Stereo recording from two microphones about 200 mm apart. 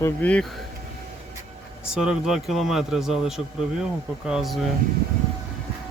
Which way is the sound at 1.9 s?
5° right (ahead or behind).